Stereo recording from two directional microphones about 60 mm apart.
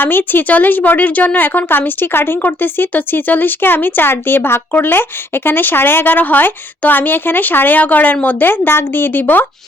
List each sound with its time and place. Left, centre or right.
0.0 s speech: left